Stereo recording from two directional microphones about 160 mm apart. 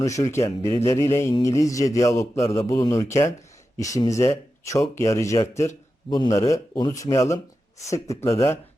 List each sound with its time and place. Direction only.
0.0 s a man's voice: 20° left (ahead or behind)